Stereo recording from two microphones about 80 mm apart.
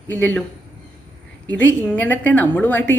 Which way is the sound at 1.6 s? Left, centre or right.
Left.